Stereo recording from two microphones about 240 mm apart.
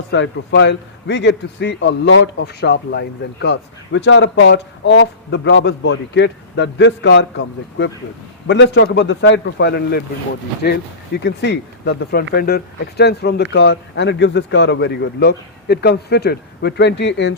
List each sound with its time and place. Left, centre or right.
0.1 s a man's voice: left